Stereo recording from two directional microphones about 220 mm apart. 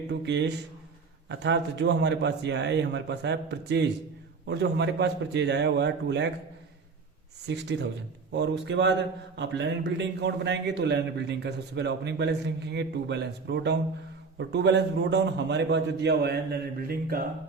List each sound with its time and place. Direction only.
0.1 s speech: 50° right (ahead or behind)
7.4 s speech: 50° right (ahead or behind)